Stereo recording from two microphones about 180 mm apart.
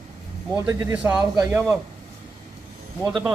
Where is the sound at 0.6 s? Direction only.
10° right (ahead or behind).